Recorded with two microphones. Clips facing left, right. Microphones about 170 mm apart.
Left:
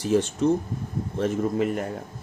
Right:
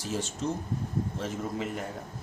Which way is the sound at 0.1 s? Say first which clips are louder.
Left 11 dB; 60° left (ahead or behind).